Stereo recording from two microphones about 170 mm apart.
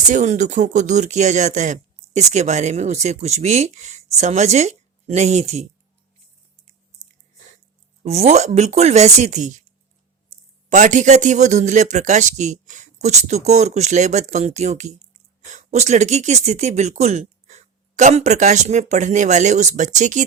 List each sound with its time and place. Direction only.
0.1 s speech: 45° right (ahead or behind)
8.0 s speech: 40° right (ahead or behind)
10.7 s speech: 45° right (ahead or behind)